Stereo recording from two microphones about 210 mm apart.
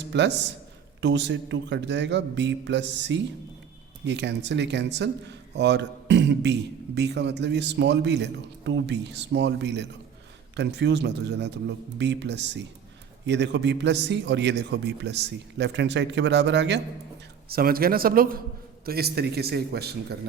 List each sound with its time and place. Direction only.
0.0 s a man's voice: 55° right (ahead or behind)
17.5 s a man's voice: 45° right (ahead or behind)